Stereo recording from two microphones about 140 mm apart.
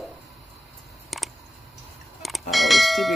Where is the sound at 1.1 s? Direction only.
Centre (ahead or behind).